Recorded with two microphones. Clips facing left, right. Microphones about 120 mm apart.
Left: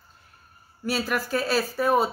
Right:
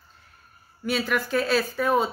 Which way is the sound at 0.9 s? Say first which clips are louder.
Right 1 dB; 5° left (ahead or behind).